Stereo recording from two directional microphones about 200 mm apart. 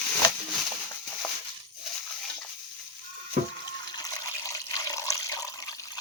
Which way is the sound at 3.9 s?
20° left (ahead or behind).